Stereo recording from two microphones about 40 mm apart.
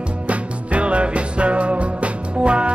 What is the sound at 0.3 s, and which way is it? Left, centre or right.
Music, right.